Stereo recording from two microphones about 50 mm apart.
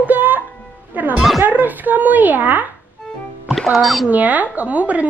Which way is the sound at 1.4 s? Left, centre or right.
Right.